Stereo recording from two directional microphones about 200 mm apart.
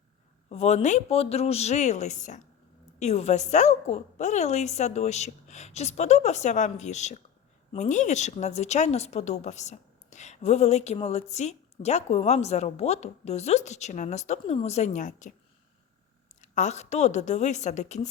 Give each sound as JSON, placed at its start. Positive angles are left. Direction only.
{"t": 0.5, "sound": "a woman's voice", "side_deg": 35}
{"t": 16.4, "sound": "a woman's voice", "side_deg": 35}